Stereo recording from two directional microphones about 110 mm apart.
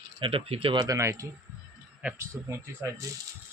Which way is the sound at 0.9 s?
25° right (ahead or behind).